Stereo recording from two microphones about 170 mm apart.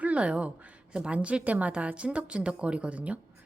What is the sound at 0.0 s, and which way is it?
A woman's voice, 5° right (ahead or behind).